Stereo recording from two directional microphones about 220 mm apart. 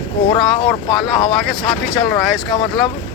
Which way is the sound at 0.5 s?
20° left (ahead or behind).